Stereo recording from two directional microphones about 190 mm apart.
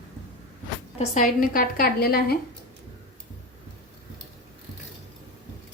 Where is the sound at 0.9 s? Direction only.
40° left (ahead or behind).